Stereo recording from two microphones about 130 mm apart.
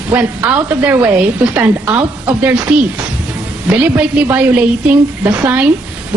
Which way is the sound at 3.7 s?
10° right (ahead or behind).